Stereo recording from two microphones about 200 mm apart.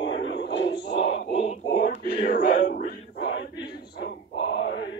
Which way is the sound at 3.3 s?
65° left (ahead or behind).